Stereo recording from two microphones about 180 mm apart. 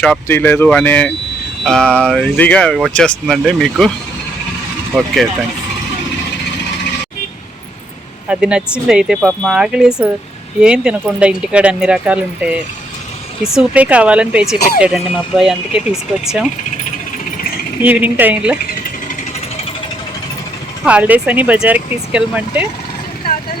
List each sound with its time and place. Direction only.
0.0 s speech: 10° left (ahead or behind)
8.3 s speech: 5° right (ahead or behind)
13.6 s speech: 5° right (ahead or behind)
17.8 s speech: 10° right (ahead or behind)
20.8 s speech: 10° right (ahead or behind)